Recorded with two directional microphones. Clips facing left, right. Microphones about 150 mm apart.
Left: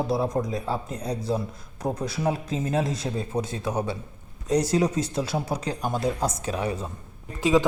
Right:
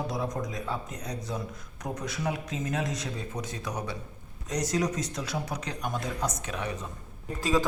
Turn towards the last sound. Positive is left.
turn(degrees=20)  # may be behind; listen again after turning